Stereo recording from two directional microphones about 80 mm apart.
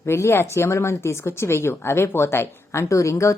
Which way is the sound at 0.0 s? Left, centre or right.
Left.